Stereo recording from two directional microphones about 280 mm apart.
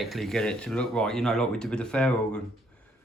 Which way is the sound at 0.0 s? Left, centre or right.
Centre.